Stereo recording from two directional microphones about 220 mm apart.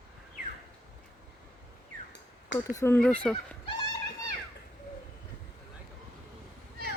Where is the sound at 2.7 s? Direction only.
10° left (ahead or behind).